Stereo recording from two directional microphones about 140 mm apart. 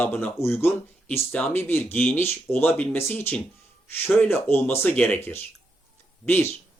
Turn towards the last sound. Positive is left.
turn(degrees=15)  # may be behind; listen again after turning